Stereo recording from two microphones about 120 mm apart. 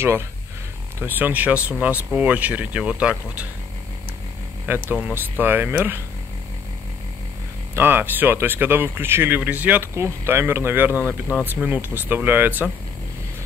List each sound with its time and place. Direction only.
0.9 s speech: 15° right (ahead or behind)
4.6 s speech: 15° right (ahead or behind)
7.7 s speech: 15° right (ahead or behind)